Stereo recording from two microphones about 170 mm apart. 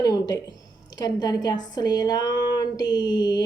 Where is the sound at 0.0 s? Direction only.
20° left (ahead or behind).